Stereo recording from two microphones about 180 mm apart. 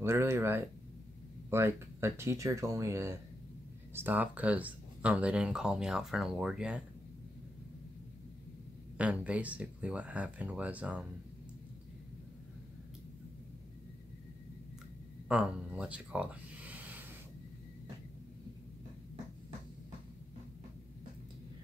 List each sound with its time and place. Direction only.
0.0 s speech: 15° right (ahead or behind)
8.9 s speech: 5° right (ahead or behind)
15.2 s speech: 5° right (ahead or behind)